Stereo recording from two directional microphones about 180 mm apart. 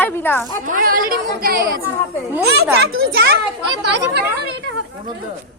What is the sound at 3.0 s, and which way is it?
Speech, 60° right (ahead or behind).